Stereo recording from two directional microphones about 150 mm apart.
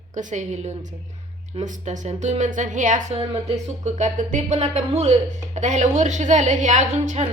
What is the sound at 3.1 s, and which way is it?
Speech, 45° right (ahead or behind).